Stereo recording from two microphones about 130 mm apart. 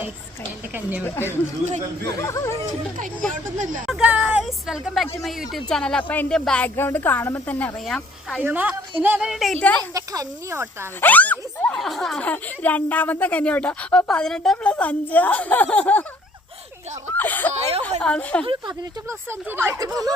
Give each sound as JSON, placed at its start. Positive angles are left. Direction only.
{"t": 0.7, "sound": "a woman's voice", "side_deg": -15}
{"t": 1.0, "sound": "speech", "side_deg": 15}
{"t": 3.6, "sound": "speech", "side_deg": -90}
{"t": 3.8, "sound": "speech", "side_deg": -5}
{"t": 7.9, "sound": "speech", "side_deg": 0}
{"t": 8.4, "sound": "a woman's voice", "side_deg": -10}
{"t": 9.9, "sound": "speech", "side_deg": -25}
{"t": 11.0, "sound": "speech", "side_deg": 15}
{"t": 17.2, "sound": "speech", "side_deg": 15}
{"t": 17.5, "sound": "a woman's voice", "side_deg": -50}
{"t": 17.8, "sound": "speech", "side_deg": 10}
{"t": 19.0, "sound": "speech", "side_deg": -15}